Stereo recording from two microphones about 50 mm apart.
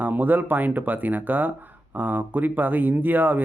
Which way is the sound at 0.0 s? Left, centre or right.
Right.